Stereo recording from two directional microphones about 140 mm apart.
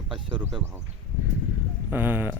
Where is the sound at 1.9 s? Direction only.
15° right (ahead or behind).